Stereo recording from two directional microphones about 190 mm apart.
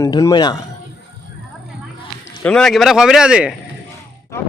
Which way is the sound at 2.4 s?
5° left (ahead or behind).